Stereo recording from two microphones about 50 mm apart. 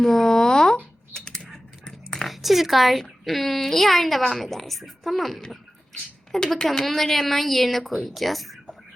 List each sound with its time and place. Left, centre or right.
0.0 s a sound: centre
1.1 s typing: centre
2.2 s speech: centre
6.4 s speech: centre